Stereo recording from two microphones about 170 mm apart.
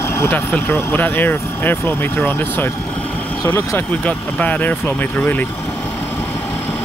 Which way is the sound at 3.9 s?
10° left (ahead or behind).